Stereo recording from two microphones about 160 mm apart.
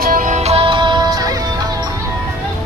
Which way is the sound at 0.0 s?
55° right (ahead or behind).